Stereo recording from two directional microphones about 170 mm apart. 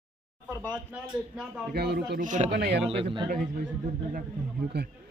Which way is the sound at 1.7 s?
75° right (ahead or behind).